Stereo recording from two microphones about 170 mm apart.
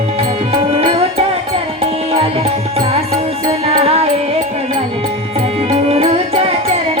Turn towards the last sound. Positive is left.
turn(degrees=-35)  # may be behind; listen again after turning